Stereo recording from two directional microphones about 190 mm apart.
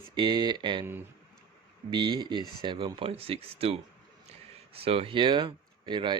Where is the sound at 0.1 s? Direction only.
20° right (ahead or behind).